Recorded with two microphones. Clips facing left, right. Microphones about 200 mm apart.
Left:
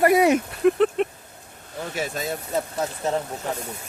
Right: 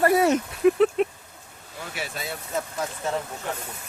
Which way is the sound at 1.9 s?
40° left (ahead or behind).